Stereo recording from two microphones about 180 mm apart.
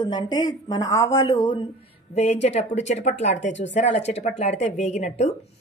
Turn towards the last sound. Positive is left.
turn(degrees=40)  # may be behind; listen again after turning